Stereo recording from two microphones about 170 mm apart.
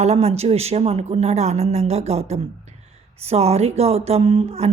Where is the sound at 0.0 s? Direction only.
40° right (ahead or behind).